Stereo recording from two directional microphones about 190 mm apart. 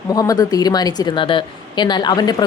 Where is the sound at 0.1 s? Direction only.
20° left (ahead or behind).